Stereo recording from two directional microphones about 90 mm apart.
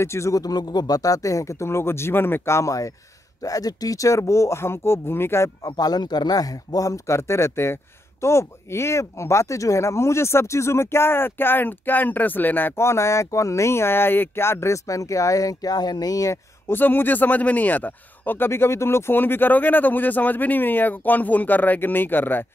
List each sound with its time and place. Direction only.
0.0 s speech: 30° left (ahead or behind)
5.6 s speech: 45° left (ahead or behind)
16.7 s speech: 20° left (ahead or behind)